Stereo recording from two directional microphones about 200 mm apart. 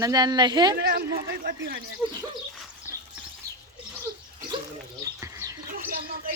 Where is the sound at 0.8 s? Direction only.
50° right (ahead or behind).